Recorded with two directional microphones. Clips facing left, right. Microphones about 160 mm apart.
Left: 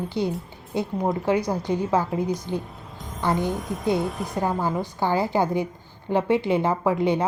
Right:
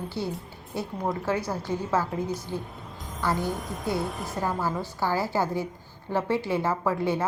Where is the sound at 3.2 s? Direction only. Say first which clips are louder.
Left 4 dB; 20° left (ahead or behind).